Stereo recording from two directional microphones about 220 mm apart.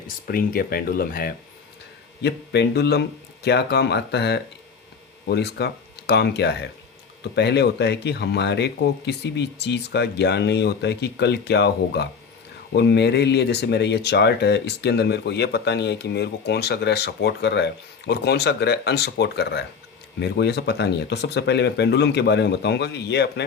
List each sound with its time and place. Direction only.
0.3 s speech: 45° left (ahead or behind)